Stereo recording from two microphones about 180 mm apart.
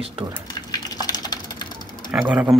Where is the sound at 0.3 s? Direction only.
20° left (ahead or behind).